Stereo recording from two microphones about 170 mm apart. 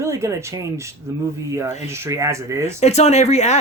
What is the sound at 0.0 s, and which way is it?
Speech, 15° right (ahead or behind).